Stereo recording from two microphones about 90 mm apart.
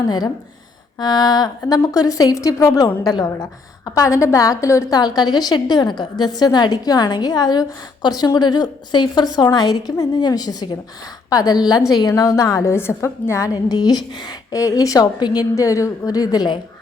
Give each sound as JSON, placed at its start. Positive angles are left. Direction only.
{"t": 0.9, "sound": "a woman's voice", "side_deg": 50}